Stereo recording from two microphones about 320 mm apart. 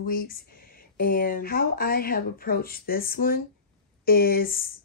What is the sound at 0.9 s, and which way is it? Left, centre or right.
Speech, left.